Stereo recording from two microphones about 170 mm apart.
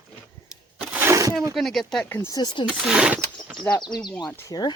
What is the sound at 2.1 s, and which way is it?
Speech, 20° left (ahead or behind).